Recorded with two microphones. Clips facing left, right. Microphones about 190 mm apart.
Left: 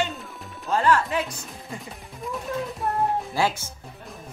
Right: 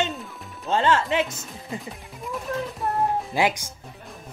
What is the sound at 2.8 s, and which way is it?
Music, centre (ahead or behind).